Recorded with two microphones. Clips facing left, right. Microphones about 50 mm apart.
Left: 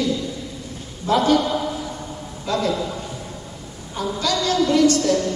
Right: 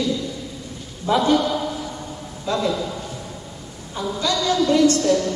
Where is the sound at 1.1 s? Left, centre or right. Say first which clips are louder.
Left 1 dB; left.